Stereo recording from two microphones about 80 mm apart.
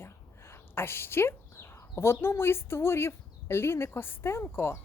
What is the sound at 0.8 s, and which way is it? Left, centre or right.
Speech, left.